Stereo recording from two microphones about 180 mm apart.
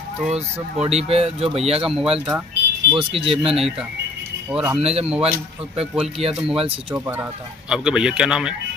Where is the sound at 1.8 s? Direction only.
5° right (ahead or behind).